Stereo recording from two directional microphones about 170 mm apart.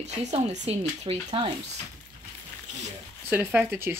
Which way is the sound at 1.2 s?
25° right (ahead or behind).